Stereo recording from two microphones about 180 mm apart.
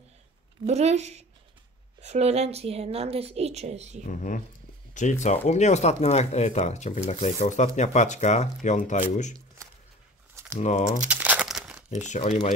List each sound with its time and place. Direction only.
0.7 s a woman's voice: 35° right (ahead or behind)
4.1 s speech: 45° left (ahead or behind)
10.6 s speech: 40° left (ahead or behind)
11.1 s crumpling: 10° right (ahead or behind)
12.1 s speech: 35° left (ahead or behind)